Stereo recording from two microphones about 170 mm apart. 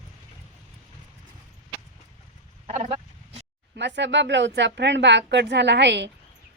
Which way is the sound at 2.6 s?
40° right (ahead or behind).